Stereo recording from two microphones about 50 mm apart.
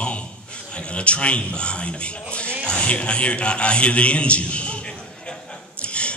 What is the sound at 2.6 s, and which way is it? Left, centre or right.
A man's voice, left.